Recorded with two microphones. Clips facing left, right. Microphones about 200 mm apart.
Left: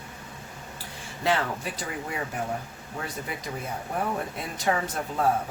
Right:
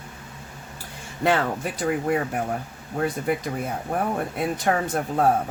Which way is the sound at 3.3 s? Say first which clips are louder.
Right 12 dB; 55° right (ahead or behind).